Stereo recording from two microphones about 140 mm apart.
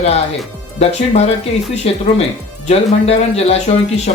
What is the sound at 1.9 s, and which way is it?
A man's voice, 45° left (ahead or behind).